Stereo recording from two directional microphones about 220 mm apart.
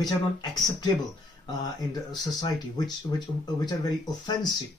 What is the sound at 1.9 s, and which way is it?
Speech, 20° left (ahead or behind).